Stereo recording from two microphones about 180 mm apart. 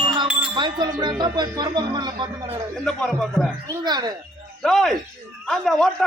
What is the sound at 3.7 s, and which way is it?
Speech, 25° right (ahead or behind).